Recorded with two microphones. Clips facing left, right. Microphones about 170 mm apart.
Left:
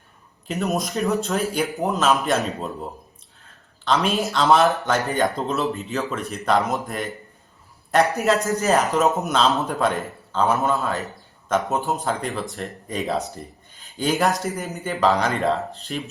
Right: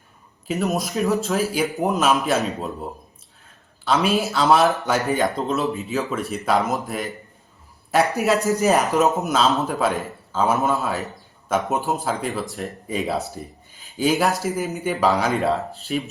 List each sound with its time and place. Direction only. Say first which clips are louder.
0.4 s speech: right 1 dB; centre (ahead or behind)
1.8 s a man's voice: right 1 dB; 15° right (ahead or behind)
2.1 s speech: right 1 dB; centre (ahead or behind)
3.8 s speech: right 1 dB; 5° right (ahead or behind)
8.2 s a man's voice: right 2 dB; 15° right (ahead or behind)
9.0 s speech: right 1 dB; centre (ahead or behind)